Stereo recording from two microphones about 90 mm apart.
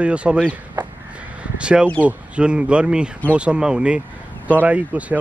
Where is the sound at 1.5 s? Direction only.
10° right (ahead or behind).